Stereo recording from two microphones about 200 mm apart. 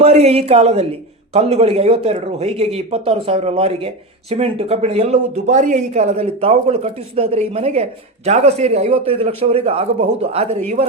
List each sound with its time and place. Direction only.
0.0 s speech: 30° right (ahead or behind)